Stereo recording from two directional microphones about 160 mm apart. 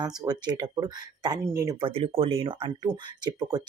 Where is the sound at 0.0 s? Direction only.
25° right (ahead or behind).